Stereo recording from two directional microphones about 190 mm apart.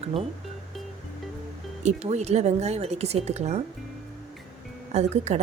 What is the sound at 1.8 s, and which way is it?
Speech, 35° right (ahead or behind).